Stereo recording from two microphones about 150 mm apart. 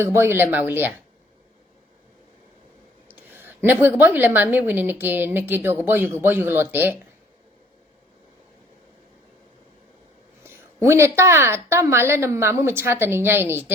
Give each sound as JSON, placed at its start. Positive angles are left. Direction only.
{"t": 0.0, "sound": "a woman's voice", "side_deg": -15}
{"t": 3.1, "sound": "a woman's voice", "side_deg": -15}
{"t": 10.4, "sound": "a woman's voice", "side_deg": -15}